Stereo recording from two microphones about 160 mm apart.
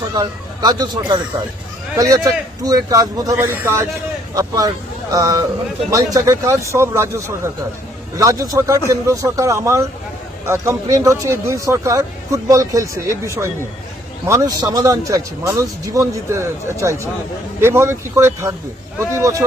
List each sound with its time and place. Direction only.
0.1 s speech: 25° right (ahead or behind)